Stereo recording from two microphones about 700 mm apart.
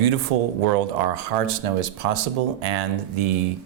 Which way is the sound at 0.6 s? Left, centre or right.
Right.